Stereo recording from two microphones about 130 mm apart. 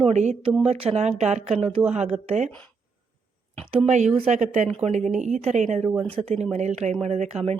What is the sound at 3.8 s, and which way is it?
Speech, 60° right (ahead or behind).